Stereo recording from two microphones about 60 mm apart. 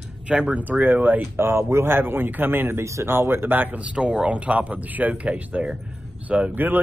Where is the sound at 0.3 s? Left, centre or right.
Right.